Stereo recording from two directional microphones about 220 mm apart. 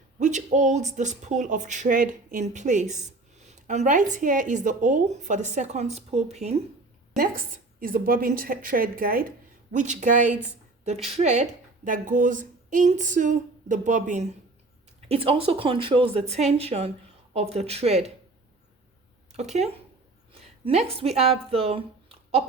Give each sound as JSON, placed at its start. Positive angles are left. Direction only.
{"t": 0.2, "sound": "speech", "side_deg": -35}
{"t": 7.2, "sound": "a woman's voice", "side_deg": -40}
{"t": 19.3, "sound": "speech", "side_deg": -30}